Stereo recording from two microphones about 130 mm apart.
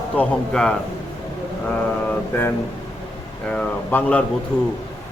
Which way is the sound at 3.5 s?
10° left (ahead or behind).